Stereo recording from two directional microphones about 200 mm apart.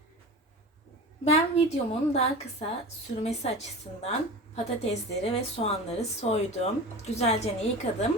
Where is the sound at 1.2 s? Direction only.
30° left (ahead or behind).